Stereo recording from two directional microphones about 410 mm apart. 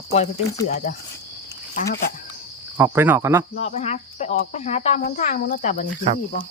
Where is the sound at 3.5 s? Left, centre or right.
Centre.